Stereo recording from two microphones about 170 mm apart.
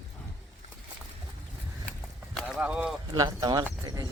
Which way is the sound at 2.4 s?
5° right (ahead or behind).